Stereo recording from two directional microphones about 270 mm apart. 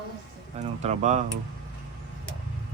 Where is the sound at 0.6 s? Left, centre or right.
Right.